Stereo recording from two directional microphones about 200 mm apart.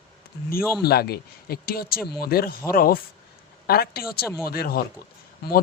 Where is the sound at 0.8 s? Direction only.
50° left (ahead or behind).